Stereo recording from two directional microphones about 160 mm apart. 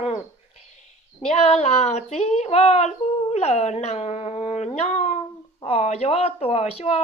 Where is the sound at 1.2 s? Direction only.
40° left (ahead or behind).